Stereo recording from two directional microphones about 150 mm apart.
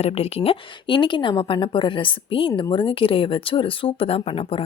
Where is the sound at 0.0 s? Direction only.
40° left (ahead or behind).